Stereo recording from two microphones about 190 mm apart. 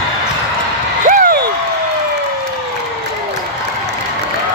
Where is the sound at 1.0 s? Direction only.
45° right (ahead or behind).